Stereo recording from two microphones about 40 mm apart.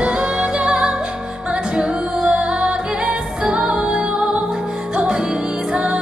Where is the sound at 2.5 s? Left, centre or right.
Centre.